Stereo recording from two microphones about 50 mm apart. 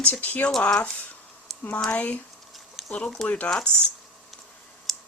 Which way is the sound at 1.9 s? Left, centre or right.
Left.